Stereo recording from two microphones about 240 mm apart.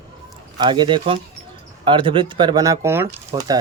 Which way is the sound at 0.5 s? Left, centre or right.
Centre.